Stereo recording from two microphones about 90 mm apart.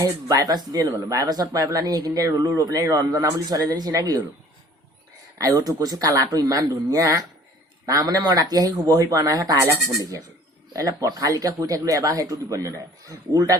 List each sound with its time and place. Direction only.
0.3 s speech: 45° right (ahead or behind)
5.4 s speech: 45° right (ahead or behind)